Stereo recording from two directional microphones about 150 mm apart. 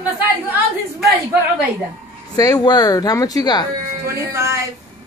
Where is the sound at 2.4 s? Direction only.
25° left (ahead or behind).